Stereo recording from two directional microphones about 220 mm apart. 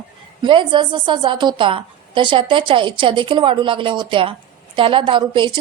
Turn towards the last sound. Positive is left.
turn(degrees=-20)  # may be behind; listen again after turning